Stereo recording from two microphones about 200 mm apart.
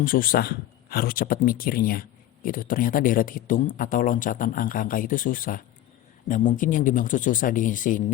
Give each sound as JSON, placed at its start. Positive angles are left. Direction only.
{"t": 0.0, "sound": "speech", "side_deg": 45}